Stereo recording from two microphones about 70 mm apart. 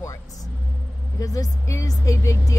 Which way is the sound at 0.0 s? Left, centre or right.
Left.